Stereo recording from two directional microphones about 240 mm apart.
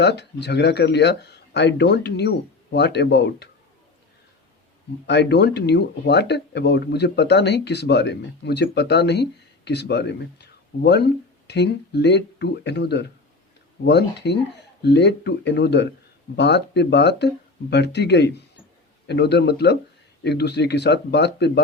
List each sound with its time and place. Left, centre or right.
0.0 s speech: left
5.0 s speech: left